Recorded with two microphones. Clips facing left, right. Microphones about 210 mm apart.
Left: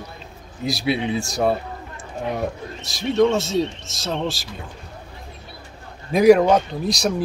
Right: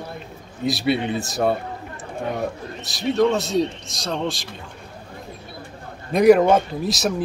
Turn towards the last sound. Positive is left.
turn(degrees=0)  # may be behind; listen again after turning